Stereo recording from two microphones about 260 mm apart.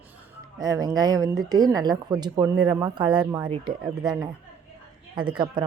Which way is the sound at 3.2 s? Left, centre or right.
Centre.